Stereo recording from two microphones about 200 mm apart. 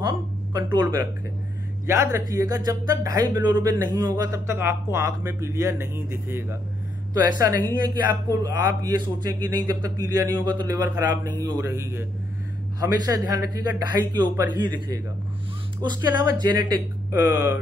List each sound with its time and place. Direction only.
0.6 s a man's voice: 20° right (ahead or behind)
17.1 s speech: 10° right (ahead or behind)